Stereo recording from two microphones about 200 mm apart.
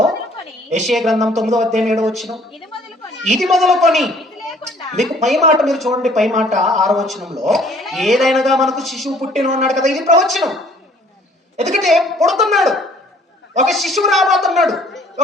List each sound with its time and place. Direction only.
0.9 s a man's voice: centre (ahead or behind)
11.5 s a woman's voice: 35° right (ahead or behind)
11.8 s a man's voice: centre (ahead or behind)